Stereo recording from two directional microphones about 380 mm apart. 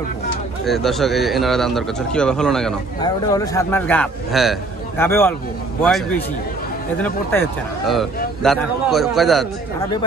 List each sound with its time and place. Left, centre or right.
0.7 s speech: centre